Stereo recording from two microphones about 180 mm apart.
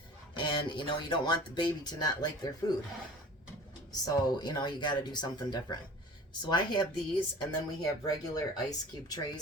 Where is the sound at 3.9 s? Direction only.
20° left (ahead or behind).